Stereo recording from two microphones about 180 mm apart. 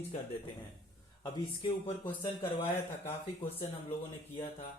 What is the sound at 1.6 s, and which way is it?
Speech, 30° left (ahead or behind).